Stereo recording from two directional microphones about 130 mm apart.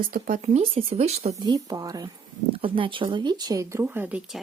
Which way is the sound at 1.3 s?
30° right (ahead or behind).